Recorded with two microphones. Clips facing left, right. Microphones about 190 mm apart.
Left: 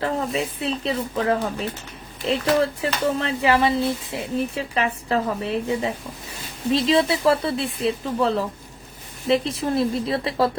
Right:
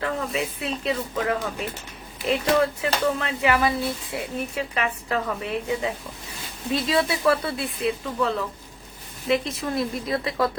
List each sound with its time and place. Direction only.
0.3 s speech: 30° left (ahead or behind)